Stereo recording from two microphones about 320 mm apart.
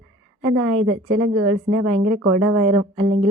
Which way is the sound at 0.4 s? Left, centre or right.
Right.